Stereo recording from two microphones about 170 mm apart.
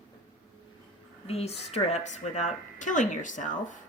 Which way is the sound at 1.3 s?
35° left (ahead or behind).